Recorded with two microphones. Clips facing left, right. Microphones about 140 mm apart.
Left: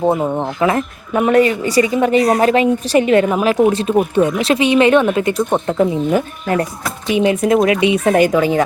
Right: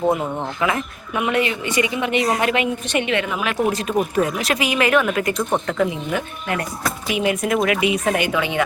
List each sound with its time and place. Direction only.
0.0 s speech: 25° left (ahead or behind)